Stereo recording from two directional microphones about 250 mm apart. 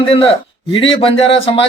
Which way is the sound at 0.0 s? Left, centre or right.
Left.